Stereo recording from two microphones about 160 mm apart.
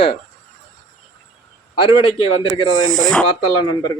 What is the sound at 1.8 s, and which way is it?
Speech, 35° left (ahead or behind).